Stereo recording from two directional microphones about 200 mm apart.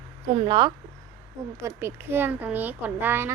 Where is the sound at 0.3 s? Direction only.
25° right (ahead or behind).